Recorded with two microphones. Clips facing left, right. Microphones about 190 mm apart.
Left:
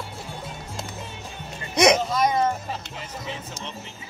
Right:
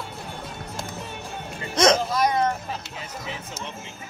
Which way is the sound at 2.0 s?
Centre (ahead or behind).